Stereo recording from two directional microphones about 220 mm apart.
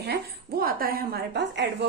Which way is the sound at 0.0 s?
45° right (ahead or behind).